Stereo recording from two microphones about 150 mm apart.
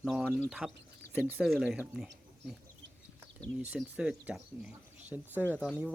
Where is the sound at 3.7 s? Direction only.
10° right (ahead or behind).